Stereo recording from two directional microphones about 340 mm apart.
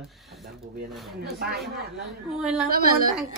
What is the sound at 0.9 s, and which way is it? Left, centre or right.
Speech, centre.